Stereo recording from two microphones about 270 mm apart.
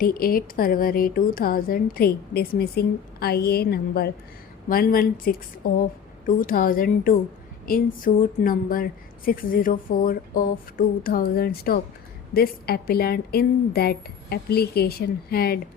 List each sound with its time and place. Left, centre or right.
0.0 s a woman's voice: left